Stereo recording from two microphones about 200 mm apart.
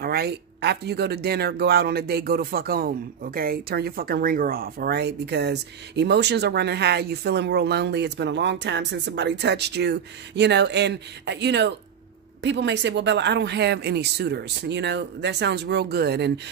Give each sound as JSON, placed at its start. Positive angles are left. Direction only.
{"t": 0.0, "sound": "speech", "side_deg": -50}